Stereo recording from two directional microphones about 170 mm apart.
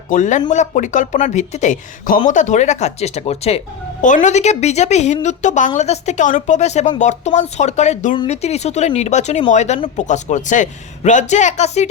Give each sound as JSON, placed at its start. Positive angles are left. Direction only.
{"t": 0.1, "sound": "speech", "side_deg": 45}